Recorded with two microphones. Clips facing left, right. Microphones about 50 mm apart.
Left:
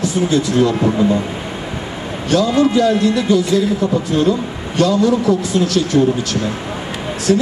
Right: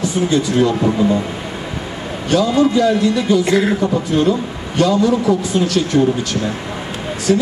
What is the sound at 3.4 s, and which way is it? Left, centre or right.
Speech, right.